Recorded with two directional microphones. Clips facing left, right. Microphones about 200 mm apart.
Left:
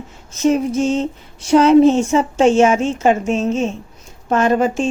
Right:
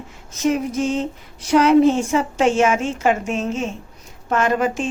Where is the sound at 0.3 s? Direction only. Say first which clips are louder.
Left 4 dB; 25° left (ahead or behind).